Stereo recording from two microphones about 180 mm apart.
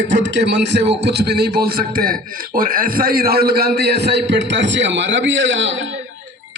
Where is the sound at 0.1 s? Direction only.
80° right.